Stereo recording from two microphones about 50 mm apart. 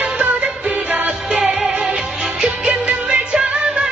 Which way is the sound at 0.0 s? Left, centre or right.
Right.